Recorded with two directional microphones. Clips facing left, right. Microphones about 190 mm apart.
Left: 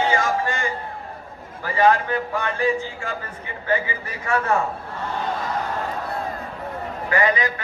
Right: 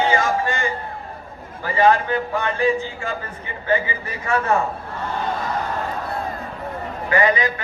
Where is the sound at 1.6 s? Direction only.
25° right (ahead or behind).